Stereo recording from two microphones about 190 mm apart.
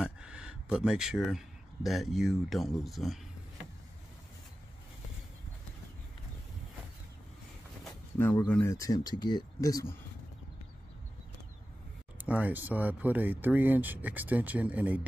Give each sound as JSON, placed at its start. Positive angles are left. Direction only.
{"t": 0.0, "sound": "speech", "side_deg": -5}
{"t": 8.2, "sound": "speech", "side_deg": 10}
{"t": 12.2, "sound": "speech", "side_deg": -10}